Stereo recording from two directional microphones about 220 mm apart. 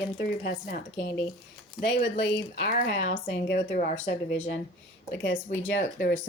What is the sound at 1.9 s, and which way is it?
A woman's voice, 50° left (ahead or behind).